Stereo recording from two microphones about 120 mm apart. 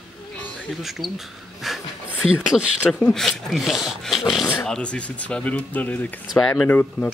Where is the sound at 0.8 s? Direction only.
Centre (ahead or behind).